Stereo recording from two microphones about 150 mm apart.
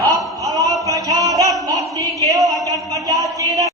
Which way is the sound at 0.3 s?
25° right (ahead or behind).